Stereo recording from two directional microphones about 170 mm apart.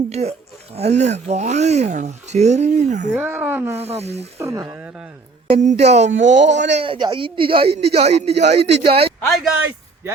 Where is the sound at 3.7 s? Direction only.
40° right (ahead or behind).